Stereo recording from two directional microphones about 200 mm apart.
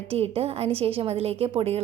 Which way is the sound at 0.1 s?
30° right (ahead or behind).